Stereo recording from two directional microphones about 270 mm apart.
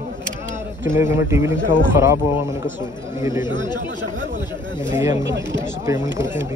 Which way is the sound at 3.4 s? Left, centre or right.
Centre.